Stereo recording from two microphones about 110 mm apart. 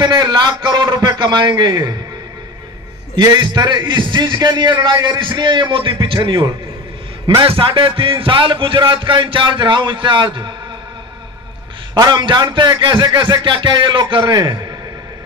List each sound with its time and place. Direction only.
0.0 s a man's voice: 40° right (ahead or behind)
3.2 s a man's voice: 40° right (ahead or behind)
12.0 s a man's voice: 45° right (ahead or behind)